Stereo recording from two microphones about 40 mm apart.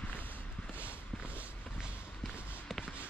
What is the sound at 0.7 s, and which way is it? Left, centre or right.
Walk, right.